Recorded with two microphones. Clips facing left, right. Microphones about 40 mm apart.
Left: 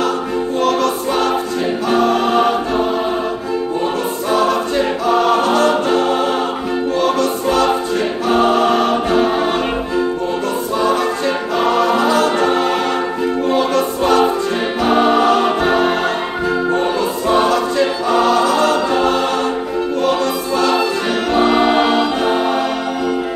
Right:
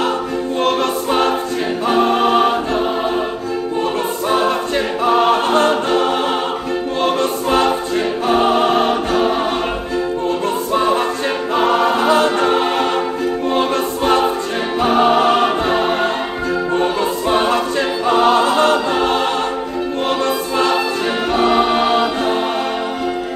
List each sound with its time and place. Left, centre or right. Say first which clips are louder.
0.6 s choir: left 1 dB; right
4.3 s choir: left 2 dB; right
5.9 s music: left 1 dB; right
8.4 s choir: left 1 dB; right
9.2 s choir: left 1 dB; centre
10.7 s choir: even; right
12.4 s music: even; right
14.9 s choir: even; centre
17.3 s choir: left 3 dB; right
19.0 s music: left 1 dB; right
21.4 s music: left 2 dB; centre